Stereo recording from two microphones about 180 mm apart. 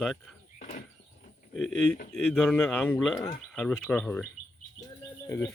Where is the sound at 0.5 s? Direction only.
45° left (ahead or behind).